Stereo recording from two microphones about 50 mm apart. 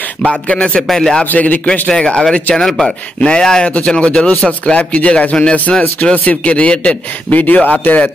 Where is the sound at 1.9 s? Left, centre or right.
Centre.